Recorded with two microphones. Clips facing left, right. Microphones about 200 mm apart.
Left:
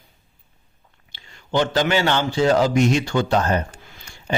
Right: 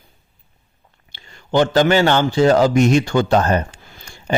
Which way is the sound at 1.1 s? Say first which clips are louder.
Right 4 dB; 50° right (ahead or behind).